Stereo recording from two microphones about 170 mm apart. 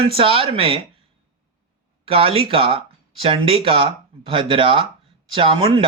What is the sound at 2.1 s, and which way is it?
Speech, 35° right (ahead or behind).